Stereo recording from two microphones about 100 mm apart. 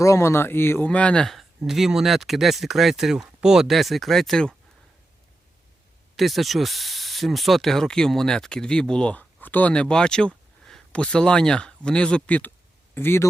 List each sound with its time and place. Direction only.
0.0 s speech: 30° left (ahead or behind)
0.9 s speech: 10° left (ahead or behind)
6.1 s speech: centre (ahead or behind); by 13.2 s 25° left (ahead or behind)